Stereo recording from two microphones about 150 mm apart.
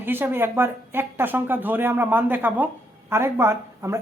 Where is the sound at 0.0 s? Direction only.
15° right (ahead or behind).